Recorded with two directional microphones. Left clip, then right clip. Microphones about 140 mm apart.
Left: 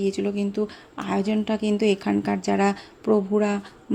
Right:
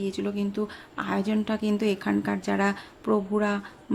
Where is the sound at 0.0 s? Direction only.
20° left (ahead or behind).